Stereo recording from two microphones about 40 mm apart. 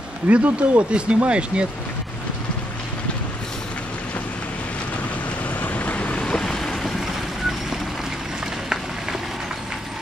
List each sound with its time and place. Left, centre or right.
0.3 s speech: right
5.6 s vehicle: left
6.2 s vehicle: centre